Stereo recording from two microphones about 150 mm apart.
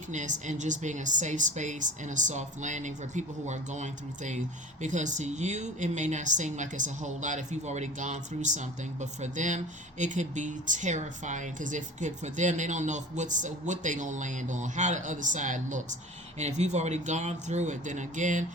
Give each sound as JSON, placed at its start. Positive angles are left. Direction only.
{"t": 0.1, "sound": "speech", "side_deg": -55}